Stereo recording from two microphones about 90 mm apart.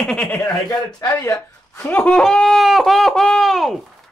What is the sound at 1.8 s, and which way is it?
Giggle, 15° left (ahead or behind).